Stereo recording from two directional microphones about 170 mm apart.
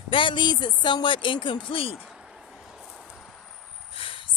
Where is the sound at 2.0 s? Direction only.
5° right (ahead or behind).